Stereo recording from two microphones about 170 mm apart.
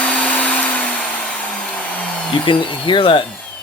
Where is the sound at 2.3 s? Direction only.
30° left (ahead or behind).